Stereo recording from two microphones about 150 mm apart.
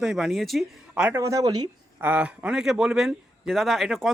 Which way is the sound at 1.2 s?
25° right (ahead or behind).